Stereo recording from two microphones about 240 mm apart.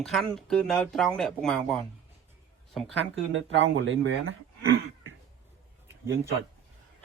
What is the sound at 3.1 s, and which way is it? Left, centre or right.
Speech, right.